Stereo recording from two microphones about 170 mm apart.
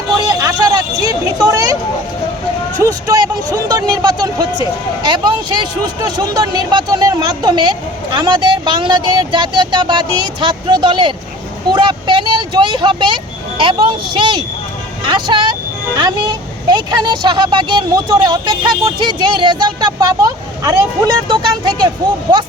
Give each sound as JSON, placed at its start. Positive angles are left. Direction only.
{"t": 0.3, "sound": "vehicle", "side_deg": -20}
{"t": 2.8, "sound": "speech", "side_deg": -20}